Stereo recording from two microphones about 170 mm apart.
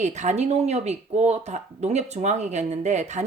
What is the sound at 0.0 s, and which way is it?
Speech, 45° right (ahead or behind).